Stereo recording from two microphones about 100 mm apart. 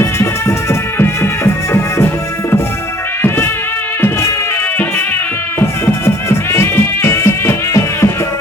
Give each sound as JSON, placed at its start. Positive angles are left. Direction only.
{"t": 0.0, "sound": "music", "side_deg": 25}
{"t": 3.2, "sound": "music", "side_deg": 25}
{"t": 5.5, "sound": "music", "side_deg": 25}